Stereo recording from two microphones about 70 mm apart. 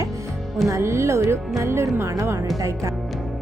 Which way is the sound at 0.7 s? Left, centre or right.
Right.